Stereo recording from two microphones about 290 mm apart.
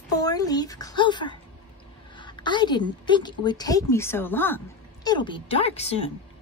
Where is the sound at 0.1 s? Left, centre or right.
Centre.